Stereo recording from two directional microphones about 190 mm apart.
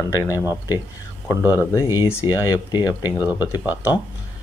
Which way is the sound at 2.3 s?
20° left (ahead or behind).